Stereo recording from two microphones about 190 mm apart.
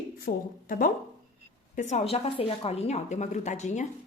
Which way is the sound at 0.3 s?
45° left (ahead or behind).